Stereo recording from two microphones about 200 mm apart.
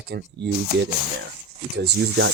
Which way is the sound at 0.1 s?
60° right (ahead or behind).